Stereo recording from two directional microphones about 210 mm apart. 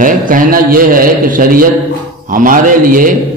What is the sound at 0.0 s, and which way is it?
Speech, 40° right (ahead or behind).